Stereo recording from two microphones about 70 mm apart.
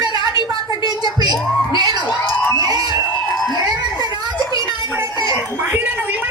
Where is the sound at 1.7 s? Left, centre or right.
Right.